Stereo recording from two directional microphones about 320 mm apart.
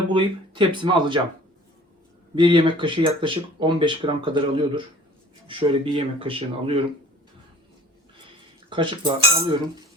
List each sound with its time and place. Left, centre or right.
0.1 s speech: centre
2.3 s speech: centre
8.7 s speech: centre